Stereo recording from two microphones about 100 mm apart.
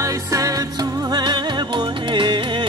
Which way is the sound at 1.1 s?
45° right (ahead or behind).